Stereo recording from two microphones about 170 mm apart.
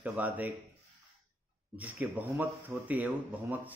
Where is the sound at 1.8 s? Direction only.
10° right (ahead or behind).